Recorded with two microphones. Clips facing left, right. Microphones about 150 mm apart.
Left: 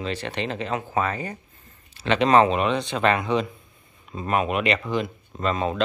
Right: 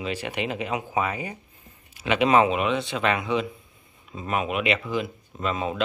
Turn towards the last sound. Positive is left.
turn(degrees=-5)  # may be behind; listen again after turning